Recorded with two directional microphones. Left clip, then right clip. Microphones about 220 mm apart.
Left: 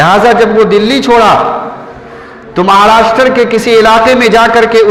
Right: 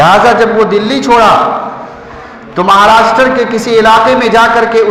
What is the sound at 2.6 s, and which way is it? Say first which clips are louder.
A man's voice: even; 40° left (ahead or behind).